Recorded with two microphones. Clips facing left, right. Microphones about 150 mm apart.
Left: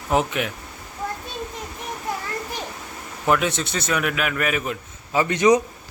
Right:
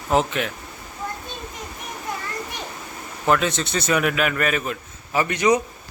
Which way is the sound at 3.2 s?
10° left (ahead or behind).